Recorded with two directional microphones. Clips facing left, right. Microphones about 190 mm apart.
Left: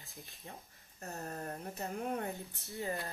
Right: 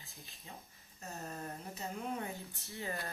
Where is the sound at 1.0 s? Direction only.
55° left (ahead or behind).